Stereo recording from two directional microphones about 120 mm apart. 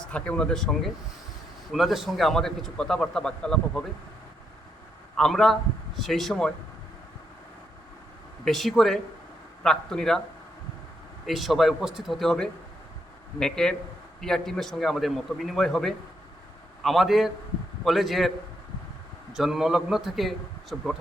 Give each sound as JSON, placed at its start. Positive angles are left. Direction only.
{"t": 0.0, "sound": "a man's voice", "side_deg": 10}
{"t": 5.1, "sound": "a man's voice", "side_deg": 0}
{"t": 8.4, "sound": "a man's voice", "side_deg": 0}
{"t": 11.3, "sound": "a man's voice", "side_deg": 0}
{"t": 19.3, "sound": "a man's voice", "side_deg": -5}